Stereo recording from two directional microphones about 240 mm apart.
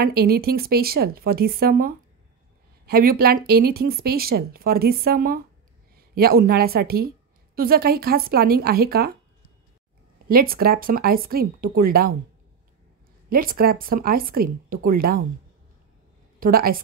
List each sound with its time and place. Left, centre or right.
0.0 s speech: right
10.2 s speech: right
13.3 s speech: right
16.3 s a woman's voice: right